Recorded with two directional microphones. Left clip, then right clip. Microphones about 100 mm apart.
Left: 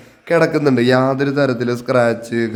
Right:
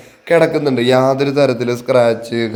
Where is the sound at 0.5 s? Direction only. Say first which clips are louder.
Even; 40° left (ahead or behind).